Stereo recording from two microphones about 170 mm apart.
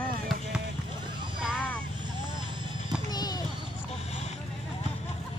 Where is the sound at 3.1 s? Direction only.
25° left (ahead or behind).